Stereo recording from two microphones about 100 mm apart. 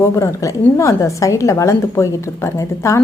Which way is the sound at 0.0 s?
30° left (ahead or behind).